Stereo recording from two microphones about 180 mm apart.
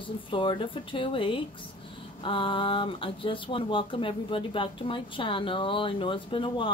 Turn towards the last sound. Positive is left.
turn(degrees=30)  # may be behind; listen again after turning